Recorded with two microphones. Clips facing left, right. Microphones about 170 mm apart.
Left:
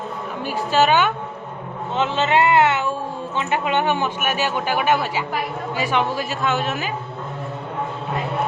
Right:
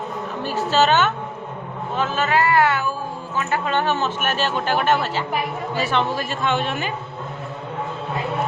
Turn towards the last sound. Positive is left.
turn(degrees=5)  # may be behind; listen again after turning